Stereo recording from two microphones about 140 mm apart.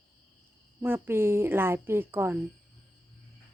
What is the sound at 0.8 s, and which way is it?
Speech, 15° right (ahead or behind).